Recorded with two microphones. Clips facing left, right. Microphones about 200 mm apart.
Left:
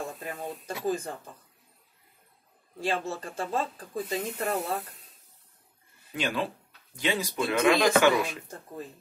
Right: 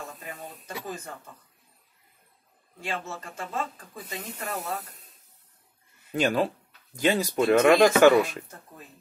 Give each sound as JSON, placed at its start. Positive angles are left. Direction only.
{"t": 0.2, "sound": "speech", "side_deg": 35}
{"t": 2.8, "sound": "speech", "side_deg": 35}
{"t": 6.1, "sound": "speech", "side_deg": -45}